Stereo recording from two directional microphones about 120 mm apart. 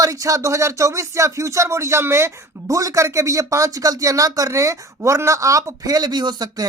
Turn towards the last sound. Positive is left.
turn(degrees=-35)  # may be behind; listen again after turning